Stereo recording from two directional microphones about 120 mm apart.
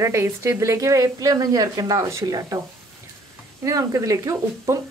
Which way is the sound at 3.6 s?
30° right (ahead or behind).